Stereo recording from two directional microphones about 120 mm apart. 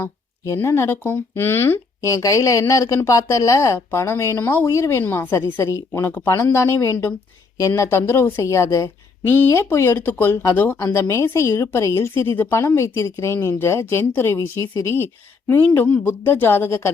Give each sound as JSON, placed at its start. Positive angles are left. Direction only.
{"t": 0.0, "sound": "speech", "side_deg": 20}